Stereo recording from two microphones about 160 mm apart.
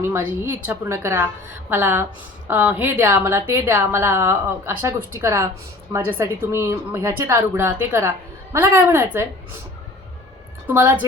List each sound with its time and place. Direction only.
0.0 s a woman's voice: 15° right (ahead or behind)
10.7 s a woman's voice: 15° right (ahead or behind)